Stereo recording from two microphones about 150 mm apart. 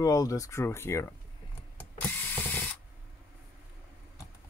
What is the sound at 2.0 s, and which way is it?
Mechanisms, 10° left (ahead or behind).